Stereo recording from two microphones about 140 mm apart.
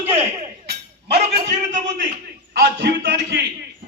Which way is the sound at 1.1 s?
55° right (ahead or behind).